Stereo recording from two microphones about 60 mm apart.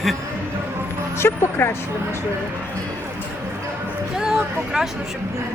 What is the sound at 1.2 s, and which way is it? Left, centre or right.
Speech, left.